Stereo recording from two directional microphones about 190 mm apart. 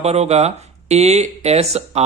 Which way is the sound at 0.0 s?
35° right (ahead or behind).